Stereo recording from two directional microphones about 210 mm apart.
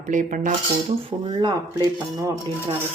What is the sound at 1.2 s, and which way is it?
Speech, 20° right (ahead or behind).